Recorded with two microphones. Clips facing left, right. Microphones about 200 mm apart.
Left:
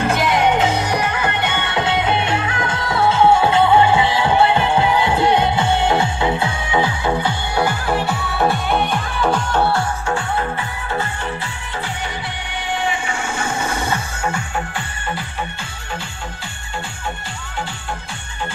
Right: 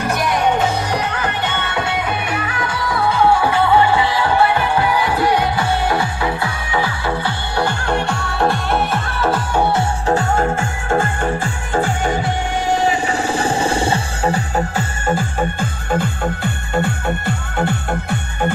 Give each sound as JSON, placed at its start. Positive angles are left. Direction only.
{"t": 0.0, "sound": "music", "side_deg": 25}
{"t": 9.6, "sound": "music", "side_deg": -20}
{"t": 10.0, "sound": "music", "side_deg": -40}